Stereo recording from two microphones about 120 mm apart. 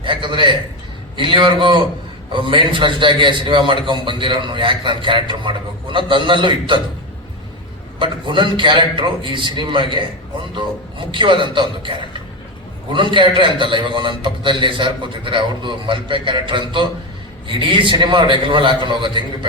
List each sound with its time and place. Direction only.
0.0 s a man's voice: 40° right (ahead or behind)
7.9 s a man's voice: 40° right (ahead or behind)
11.1 s a man's voice: 40° right (ahead or behind)